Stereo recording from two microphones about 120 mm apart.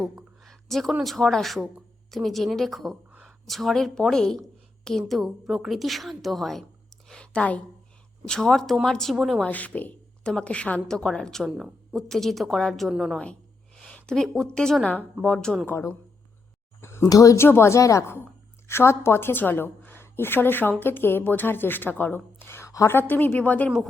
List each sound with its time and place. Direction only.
0.0 s a sound: centre (ahead or behind)
1.0 s a woman's voice: 5° left (ahead or behind)
9.5 s a woman's voice: 15° left (ahead or behind); by 13.1 s 5° right (ahead or behind)
13.7 s a sound: 5° left (ahead or behind)
14.5 s a woman's voice: 5° left (ahead or behind)
15.6 s a woman's voice: 20° left (ahead or behind)
17.1 s a woman's voice: 30° left (ahead or behind); by 23.7 s 10° left (ahead or behind)